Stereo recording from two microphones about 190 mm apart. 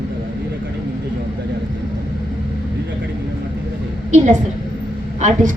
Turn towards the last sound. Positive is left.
turn(degrees=-40)  # may be behind; listen again after turning